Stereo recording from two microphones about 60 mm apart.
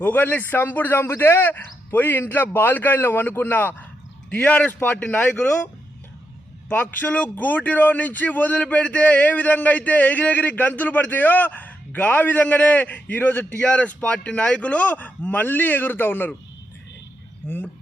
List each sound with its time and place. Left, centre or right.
0.0 s a man's voice: left
6.7 s speech: left
17.4 s speech: left